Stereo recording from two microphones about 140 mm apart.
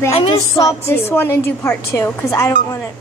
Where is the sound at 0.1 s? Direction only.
40° left (ahead or behind).